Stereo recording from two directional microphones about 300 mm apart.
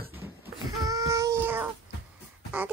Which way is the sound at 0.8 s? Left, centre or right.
Centre.